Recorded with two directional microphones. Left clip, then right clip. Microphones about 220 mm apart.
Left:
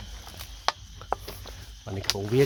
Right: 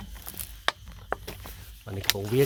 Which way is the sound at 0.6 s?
40° right (ahead or behind).